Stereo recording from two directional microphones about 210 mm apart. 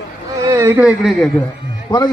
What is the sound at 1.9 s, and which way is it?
Speech, 20° left (ahead or behind).